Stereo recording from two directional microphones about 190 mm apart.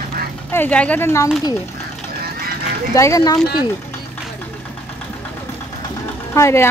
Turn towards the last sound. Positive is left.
turn(degrees=15)  # may be behind; listen again after turning